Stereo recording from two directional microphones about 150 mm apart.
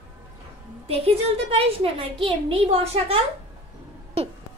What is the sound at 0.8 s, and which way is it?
A woman's voice, 40° right (ahead or behind).